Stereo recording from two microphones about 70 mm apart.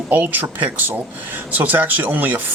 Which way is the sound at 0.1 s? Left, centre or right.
Right.